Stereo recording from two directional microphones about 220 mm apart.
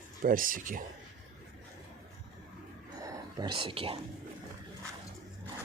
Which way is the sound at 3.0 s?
15° right (ahead or behind).